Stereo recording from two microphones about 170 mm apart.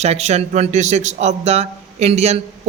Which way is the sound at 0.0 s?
40° right (ahead or behind).